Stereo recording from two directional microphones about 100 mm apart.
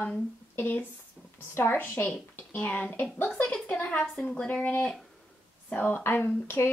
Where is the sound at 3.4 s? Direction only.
5° left (ahead or behind).